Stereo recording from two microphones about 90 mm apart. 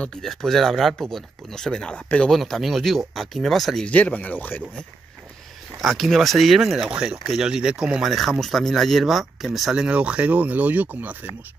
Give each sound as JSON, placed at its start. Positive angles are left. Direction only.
{"t": 0.0, "sound": "speech", "side_deg": 5}
{"t": 2.3, "sound": "speech", "side_deg": 0}
{"t": 3.9, "sound": "speech", "side_deg": 15}
{"t": 5.8, "sound": "speech", "side_deg": 0}